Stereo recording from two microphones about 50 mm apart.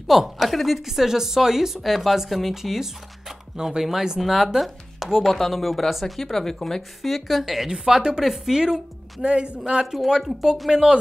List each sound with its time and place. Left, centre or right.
0.1 s a woman's voice: centre